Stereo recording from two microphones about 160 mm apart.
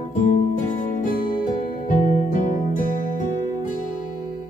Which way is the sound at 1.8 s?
55° left (ahead or behind).